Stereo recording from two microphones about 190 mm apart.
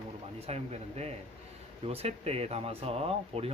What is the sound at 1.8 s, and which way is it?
Speech, 35° right (ahead or behind).